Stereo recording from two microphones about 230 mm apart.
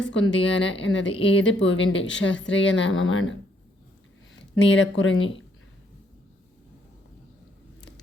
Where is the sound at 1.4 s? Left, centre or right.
Left.